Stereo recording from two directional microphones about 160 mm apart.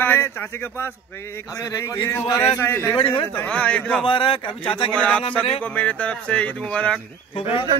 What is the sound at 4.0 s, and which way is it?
Speech, 35° left (ahead or behind).